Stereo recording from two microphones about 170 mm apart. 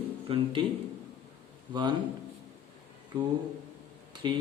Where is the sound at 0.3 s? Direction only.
30° right (ahead or behind).